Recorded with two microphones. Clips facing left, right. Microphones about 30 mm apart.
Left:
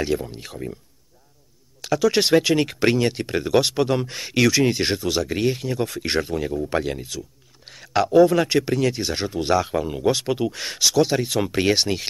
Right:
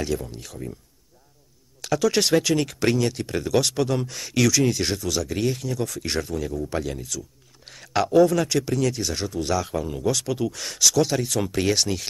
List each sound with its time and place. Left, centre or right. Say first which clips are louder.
0.0 s speech: left 3 dB; left
1.8 s speech: left 2 dB; centre; by 7.2 s left
7.6 s speech: left 2 dB; centre
8.3 s speech: left 3 dB; left